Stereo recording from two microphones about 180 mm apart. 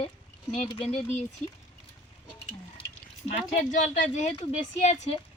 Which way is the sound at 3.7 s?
40° left (ahead or behind).